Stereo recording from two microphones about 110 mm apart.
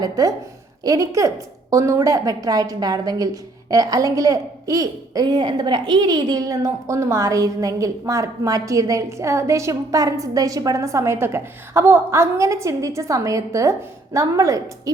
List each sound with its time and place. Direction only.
0.0 s a woman's voice: 35° right (ahead or behind)